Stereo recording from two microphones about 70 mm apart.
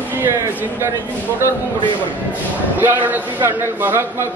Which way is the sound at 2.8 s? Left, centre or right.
Right.